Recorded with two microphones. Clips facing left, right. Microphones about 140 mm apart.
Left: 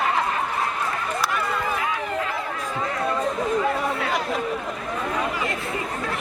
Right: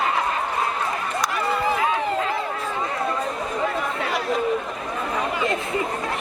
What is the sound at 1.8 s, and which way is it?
Run, 30° right (ahead or behind).